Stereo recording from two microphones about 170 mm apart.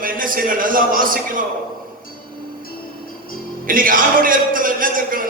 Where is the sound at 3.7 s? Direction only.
55° right (ahead or behind).